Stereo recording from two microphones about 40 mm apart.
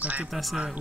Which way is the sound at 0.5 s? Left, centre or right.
Right.